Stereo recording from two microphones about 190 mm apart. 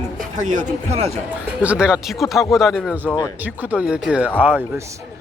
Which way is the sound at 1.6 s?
5° right (ahead or behind).